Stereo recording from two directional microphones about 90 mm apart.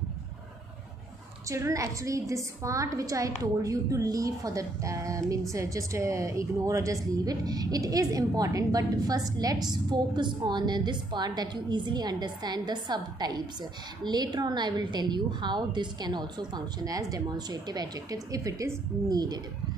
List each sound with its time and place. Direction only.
1.5 s a woman's voice: 35° right (ahead or behind)